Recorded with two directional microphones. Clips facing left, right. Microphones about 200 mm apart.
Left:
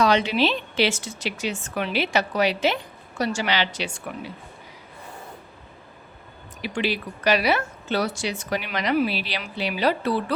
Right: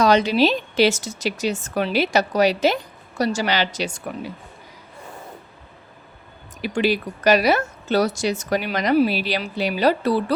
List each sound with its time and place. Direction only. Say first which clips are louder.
0.0 s speech: right 4 dB; 40° right (ahead or behind)
6.6 s speech: right 5 dB; 45° right (ahead or behind)